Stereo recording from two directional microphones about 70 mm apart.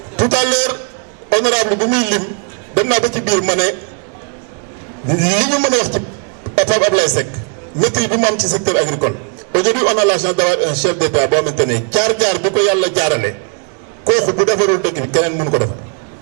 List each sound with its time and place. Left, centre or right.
0.2 s a man's voice: centre
5.0 s a man's voice: centre